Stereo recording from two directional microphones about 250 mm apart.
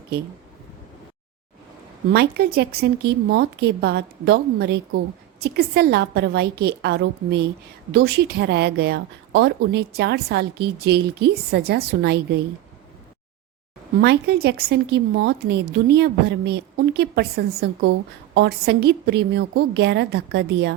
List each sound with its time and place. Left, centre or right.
2.1 s speech: right
14.0 s a woman's voice: right